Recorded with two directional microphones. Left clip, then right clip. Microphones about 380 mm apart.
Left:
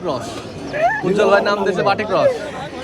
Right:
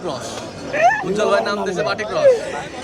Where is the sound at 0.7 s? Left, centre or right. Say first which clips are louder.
Right 2 dB; right.